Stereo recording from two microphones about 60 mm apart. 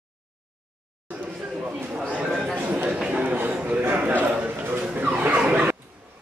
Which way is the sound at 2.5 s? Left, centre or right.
Right.